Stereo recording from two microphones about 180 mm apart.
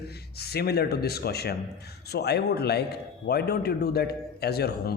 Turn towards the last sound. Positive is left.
turn(degrees=60)  # may be behind; listen again after turning